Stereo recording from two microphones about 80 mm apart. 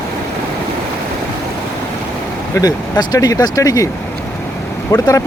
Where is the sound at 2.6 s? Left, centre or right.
Left.